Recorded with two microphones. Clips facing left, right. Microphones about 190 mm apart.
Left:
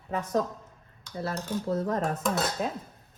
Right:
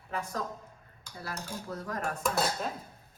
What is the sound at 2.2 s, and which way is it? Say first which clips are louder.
Speech: left 2 dB; centre (ahead or behind).